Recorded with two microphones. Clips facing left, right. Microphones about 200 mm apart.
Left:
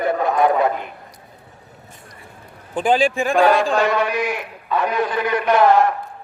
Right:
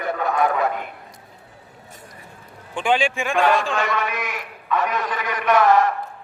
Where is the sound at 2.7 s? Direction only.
35° left (ahead or behind).